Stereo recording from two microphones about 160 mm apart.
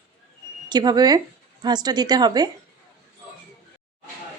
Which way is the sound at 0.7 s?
25° right (ahead or behind).